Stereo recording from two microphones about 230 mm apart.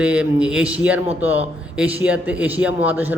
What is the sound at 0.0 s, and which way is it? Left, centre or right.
A man's voice, centre.